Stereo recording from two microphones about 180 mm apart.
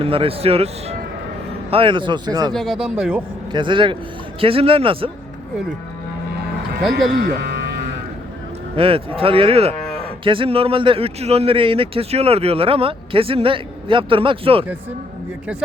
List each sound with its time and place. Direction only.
0.0 s speech: 30° right (ahead or behind)
2.5 s speech: centre (ahead or behind)
3.5 s speech: 25° right (ahead or behind)
7.4 s music: 65° right (ahead or behind)
8.7 s speech: 30° right (ahead or behind)